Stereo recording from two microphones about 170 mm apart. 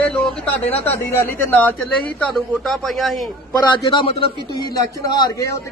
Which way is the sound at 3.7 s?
30° left (ahead or behind).